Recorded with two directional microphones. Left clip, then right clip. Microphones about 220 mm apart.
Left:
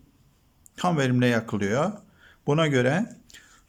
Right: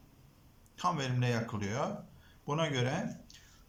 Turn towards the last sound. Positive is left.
turn(degrees=45)  # may be behind; listen again after turning